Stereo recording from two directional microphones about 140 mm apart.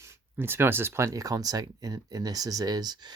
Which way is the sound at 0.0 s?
15° right (ahead or behind).